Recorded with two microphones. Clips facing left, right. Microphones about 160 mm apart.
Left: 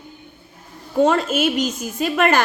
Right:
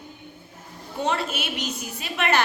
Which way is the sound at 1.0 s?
45° left (ahead or behind).